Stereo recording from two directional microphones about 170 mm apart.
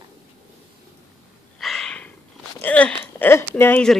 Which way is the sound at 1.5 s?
Centre (ahead or behind).